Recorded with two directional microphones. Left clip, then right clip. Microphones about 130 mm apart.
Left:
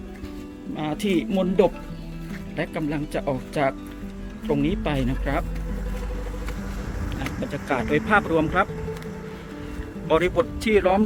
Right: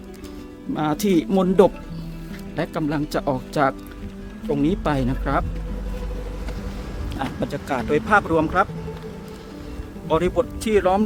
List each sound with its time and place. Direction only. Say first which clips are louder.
0.8 s speech: right 4 dB; 75° right (ahead or behind)
2.6 s speech: right 3 dB; 50° right (ahead or behind)
7.7 s speech: right 2 dB; 40° right (ahead or behind)
10.1 s speech: even; 10° right (ahead or behind)